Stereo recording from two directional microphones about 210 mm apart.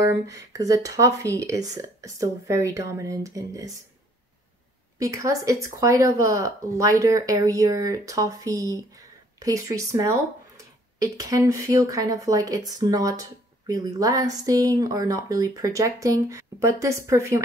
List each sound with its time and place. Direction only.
0.0 s speech: 15° right (ahead or behind)
4.9 s speech: 15° right (ahead or behind)